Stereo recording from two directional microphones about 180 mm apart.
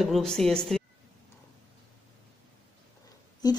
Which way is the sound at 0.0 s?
Centre (ahead or behind).